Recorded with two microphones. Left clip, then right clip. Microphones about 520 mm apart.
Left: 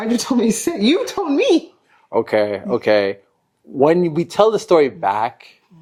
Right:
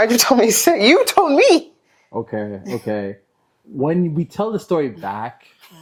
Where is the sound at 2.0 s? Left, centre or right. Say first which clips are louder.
Left 9 dB; centre.